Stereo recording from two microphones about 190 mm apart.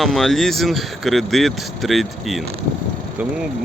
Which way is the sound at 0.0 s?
Centre (ahead or behind).